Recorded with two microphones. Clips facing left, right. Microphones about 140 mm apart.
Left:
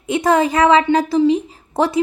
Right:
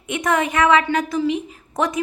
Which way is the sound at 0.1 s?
30° left (ahead or behind).